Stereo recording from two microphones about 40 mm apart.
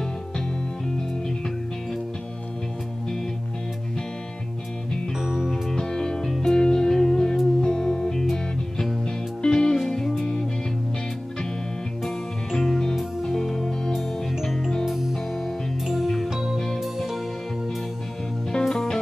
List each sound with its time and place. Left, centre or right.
5.2 s music: centre
5.8 s music: centre
12.0 s music: centre
16.5 s music: centre
16.8 s music: centre
18.5 s music: centre